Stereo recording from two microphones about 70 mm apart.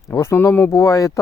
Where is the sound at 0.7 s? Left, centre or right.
Left.